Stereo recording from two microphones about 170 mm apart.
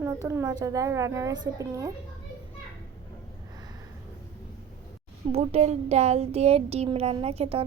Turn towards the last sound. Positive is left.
turn(degrees=-35)  # may be behind; listen again after turning